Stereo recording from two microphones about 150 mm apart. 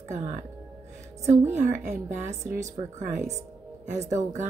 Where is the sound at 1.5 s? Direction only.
55° right (ahead or behind).